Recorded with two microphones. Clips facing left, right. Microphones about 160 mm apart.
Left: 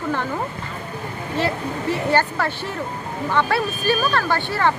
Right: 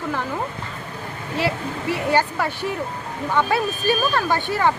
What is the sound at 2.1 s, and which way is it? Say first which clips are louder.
Speech: right 1 dB; 10° right (ahead or behind).